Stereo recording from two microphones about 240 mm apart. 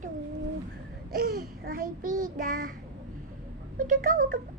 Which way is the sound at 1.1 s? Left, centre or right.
Right.